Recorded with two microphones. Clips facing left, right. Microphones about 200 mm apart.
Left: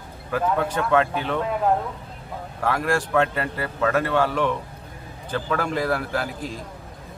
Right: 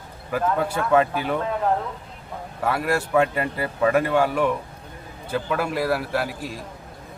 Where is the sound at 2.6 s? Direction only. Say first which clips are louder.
Even; 5° right (ahead or behind).